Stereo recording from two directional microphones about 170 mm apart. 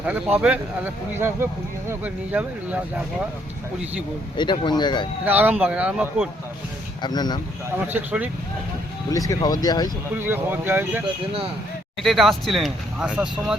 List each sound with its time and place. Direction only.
0.0 s speech: 10° right (ahead or behind)
1.9 s speech: 10° right (ahead or behind)
4.4 s speech: 25° left (ahead or behind)
5.2 s speech: 10° right (ahead or behind)
7.0 s speech: 25° left (ahead or behind)
7.9 s speech: 10° right (ahead or behind)
9.0 s speech: 20° left (ahead or behind)
10.2 s speech: 10° right (ahead or behind)
12.0 s speech: centre (ahead or behind)